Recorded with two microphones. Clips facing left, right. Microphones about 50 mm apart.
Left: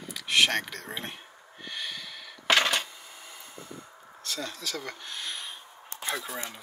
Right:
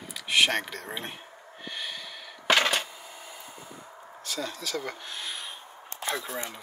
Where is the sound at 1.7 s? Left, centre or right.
Centre.